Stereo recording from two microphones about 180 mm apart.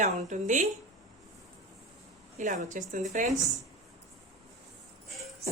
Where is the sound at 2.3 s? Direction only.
45° right (ahead or behind).